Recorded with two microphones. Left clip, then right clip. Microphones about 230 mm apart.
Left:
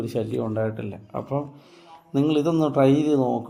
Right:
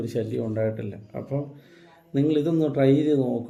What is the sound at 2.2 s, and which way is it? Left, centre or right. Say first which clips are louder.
A man's voice: left 1 dB; left.